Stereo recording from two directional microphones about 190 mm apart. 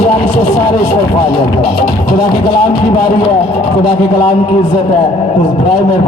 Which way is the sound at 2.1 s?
25° left (ahead or behind).